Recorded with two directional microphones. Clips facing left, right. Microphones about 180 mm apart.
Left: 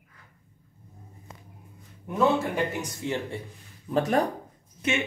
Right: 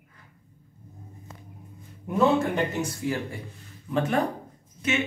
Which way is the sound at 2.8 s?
25° left (ahead or behind).